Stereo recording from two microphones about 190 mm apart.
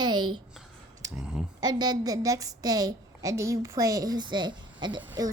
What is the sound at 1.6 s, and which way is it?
A woman's voice, 20° right (ahead or behind).